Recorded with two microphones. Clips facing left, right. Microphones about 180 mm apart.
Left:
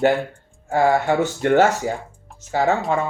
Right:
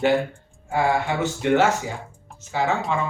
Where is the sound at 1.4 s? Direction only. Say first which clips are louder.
Left 3 dB; 40° left (ahead or behind).